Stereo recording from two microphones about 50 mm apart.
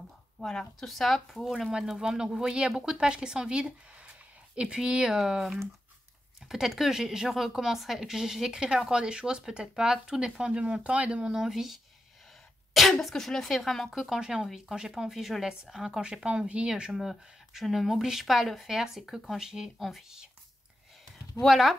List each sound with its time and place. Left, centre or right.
0.4 s speech: centre
1.7 s speech: centre
11.4 s speech: centre
16.1 s speech: right
16.9 s speech: centre
21.4 s speech: centre